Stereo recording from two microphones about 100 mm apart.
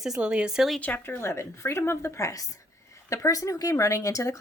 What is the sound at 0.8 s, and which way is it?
Speech, 15° left (ahead or behind).